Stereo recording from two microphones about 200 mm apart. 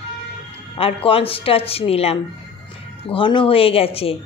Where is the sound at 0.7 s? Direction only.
30° left (ahead or behind).